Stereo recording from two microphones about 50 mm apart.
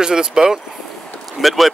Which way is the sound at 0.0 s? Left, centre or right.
Centre.